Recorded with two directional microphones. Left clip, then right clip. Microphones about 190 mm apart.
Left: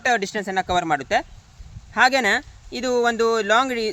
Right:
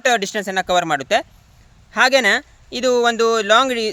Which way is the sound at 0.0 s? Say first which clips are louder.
Right 4 dB; 50° right (ahead or behind).